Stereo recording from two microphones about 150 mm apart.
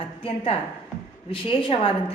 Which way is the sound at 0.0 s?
40° left (ahead or behind).